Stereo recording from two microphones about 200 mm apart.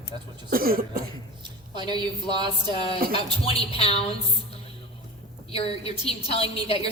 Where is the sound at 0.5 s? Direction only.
45° right (ahead or behind).